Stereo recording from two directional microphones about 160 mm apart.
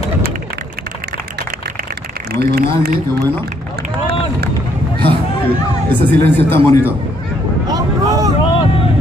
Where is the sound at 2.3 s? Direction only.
75° right (ahead or behind).